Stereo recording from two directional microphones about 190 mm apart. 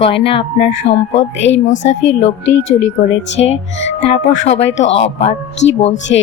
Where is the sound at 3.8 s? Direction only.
30° left (ahead or behind).